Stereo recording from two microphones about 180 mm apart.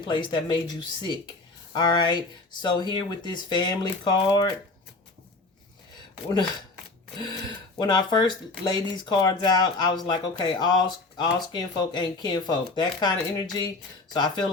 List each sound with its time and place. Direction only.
0.0 s speech: 25° left (ahead or behind)
1.7 s speech: 25° left (ahead or behind)
7.2 s speech: 25° left (ahead or behind)